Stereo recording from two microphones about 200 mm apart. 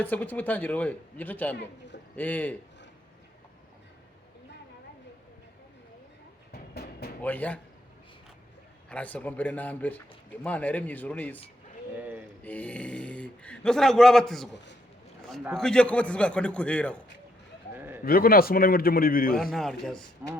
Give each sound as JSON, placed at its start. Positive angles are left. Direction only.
{"t": 0.0, "sound": "speech", "side_deg": 10}
{"t": 6.5, "sound": "music", "side_deg": 50}
{"t": 7.2, "sound": "speech", "side_deg": 10}
{"t": 8.9, "sound": "speech", "side_deg": 5}
{"t": 11.9, "sound": "speech", "side_deg": -10}
{"t": 12.4, "sound": "speech", "side_deg": 10}
{"t": 15.5, "sound": "speech", "side_deg": 5}
{"t": 17.7, "sound": "bird", "side_deg": -10}
{"t": 18.0, "sound": "a man's voice", "side_deg": 50}
{"t": 19.4, "sound": "speech", "side_deg": 0}